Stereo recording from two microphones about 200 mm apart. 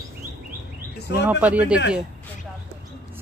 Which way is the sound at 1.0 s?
55° left (ahead or behind).